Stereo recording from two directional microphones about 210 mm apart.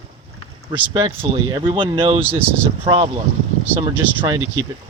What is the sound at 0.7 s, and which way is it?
Speech, 25° right (ahead or behind).